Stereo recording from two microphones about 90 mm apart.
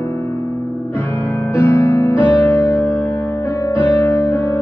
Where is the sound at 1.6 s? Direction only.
30° left (ahead or behind).